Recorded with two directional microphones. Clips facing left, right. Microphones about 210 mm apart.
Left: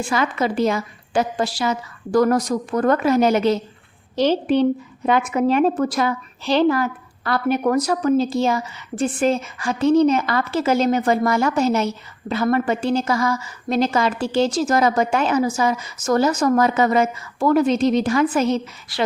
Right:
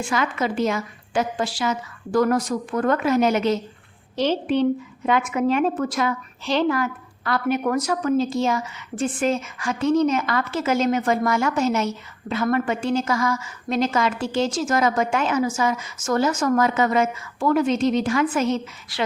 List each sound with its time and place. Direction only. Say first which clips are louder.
0.1 s a woman's voice: left 3 dB; 35° left (ahead or behind)